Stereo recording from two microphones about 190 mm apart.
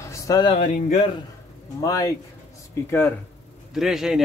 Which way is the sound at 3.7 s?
Centre (ahead or behind).